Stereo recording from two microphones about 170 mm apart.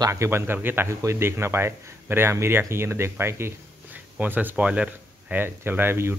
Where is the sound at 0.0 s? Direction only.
15° right (ahead or behind).